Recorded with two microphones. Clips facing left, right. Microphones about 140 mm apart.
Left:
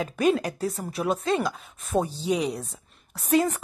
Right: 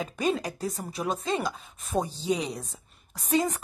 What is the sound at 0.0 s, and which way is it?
A woman's voice, 5° left (ahead or behind).